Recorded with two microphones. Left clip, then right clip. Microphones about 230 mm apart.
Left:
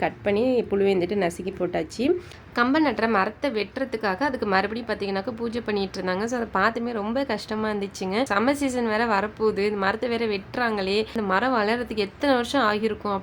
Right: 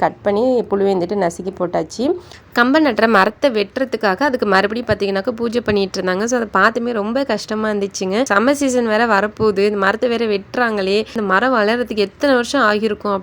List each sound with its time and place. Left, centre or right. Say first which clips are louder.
0.0 s a woman's voice: right 8 dB; centre
2.6 s a woman's voice: right 8 dB; right